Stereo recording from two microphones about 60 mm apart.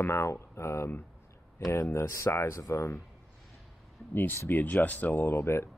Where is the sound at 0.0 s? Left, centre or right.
Left.